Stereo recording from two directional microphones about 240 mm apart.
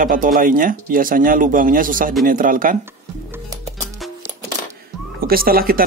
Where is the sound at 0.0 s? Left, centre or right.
Right.